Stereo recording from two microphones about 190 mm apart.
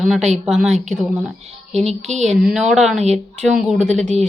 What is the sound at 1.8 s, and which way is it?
Speech, 35° right (ahead or behind).